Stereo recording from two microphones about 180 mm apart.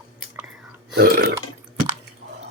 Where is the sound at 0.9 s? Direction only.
60° right (ahead or behind).